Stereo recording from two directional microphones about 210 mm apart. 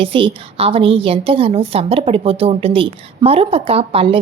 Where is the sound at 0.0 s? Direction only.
25° right (ahead or behind).